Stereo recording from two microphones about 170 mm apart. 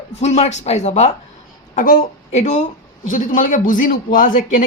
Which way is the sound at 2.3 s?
45° left (ahead or behind).